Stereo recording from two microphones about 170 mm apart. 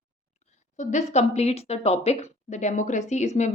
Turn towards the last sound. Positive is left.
turn(degrees=40)  # may be behind; listen again after turning